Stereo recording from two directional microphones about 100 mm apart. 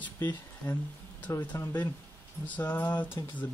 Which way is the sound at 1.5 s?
30° left (ahead or behind).